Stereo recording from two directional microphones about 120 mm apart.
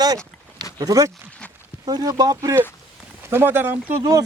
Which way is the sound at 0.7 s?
30° right (ahead or behind).